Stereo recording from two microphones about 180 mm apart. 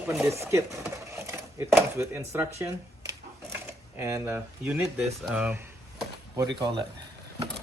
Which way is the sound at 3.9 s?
15° right (ahead or behind).